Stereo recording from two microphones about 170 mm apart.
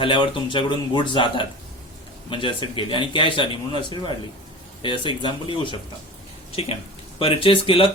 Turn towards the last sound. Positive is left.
turn(degrees=30)  # may be behind; listen again after turning